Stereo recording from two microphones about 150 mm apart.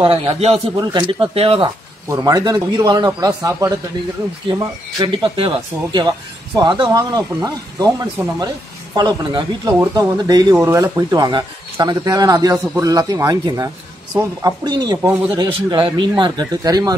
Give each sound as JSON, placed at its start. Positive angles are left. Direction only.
{"t": 0.0, "sound": "speech", "side_deg": -40}
{"t": 0.7, "sound": "speech", "side_deg": -30}
{"t": 2.0, "sound": "speech", "side_deg": -25}
{"t": 5.0, "sound": "speech", "side_deg": -30}
{"t": 8.9, "sound": "speech", "side_deg": -30}
{"t": 15.0, "sound": "speech", "side_deg": -15}
{"t": 15.3, "sound": "speech", "side_deg": -35}